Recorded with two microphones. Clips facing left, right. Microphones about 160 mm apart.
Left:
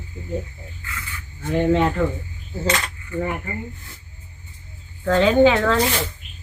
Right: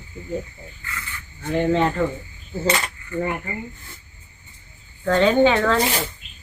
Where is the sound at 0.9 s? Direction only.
10° left (ahead or behind).